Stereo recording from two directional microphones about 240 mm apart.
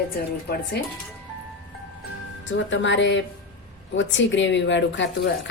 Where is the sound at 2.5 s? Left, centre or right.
Left.